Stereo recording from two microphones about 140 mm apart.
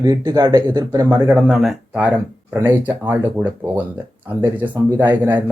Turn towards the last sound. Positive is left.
turn(degrees=-15)  # may be behind; listen again after turning